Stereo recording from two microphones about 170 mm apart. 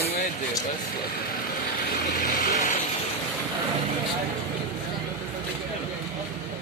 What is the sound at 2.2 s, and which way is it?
Vehicle, 55° left (ahead or behind).